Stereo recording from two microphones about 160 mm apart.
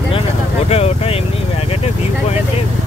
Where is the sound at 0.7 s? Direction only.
40° left (ahead or behind).